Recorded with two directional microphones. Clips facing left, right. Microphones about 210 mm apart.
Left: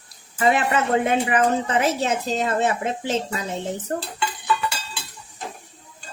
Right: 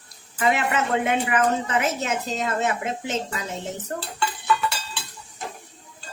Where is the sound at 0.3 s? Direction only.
35° left (ahead or behind).